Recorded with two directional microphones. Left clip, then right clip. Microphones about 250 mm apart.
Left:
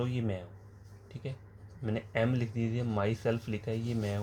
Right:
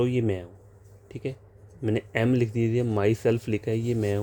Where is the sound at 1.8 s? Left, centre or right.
Right.